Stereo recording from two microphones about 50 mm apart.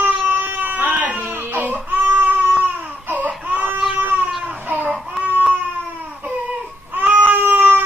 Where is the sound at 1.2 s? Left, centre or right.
Right.